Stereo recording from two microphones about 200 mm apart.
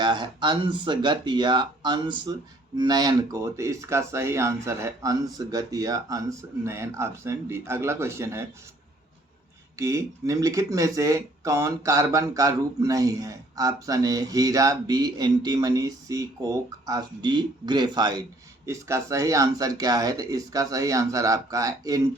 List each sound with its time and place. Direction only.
0.0 s speech: 25° right (ahead or behind)
9.7 s speech: 15° right (ahead or behind)